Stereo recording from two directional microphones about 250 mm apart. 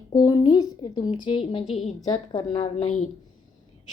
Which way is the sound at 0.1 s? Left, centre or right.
Centre.